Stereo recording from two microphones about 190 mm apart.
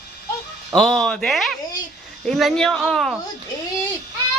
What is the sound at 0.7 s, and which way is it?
Speech, centre (ahead or behind).